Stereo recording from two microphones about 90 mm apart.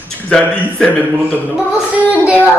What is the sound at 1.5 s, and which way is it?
Music, 15° right (ahead or behind).